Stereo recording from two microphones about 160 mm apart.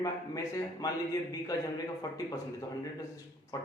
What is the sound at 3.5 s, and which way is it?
Speech, 20° left (ahead or behind).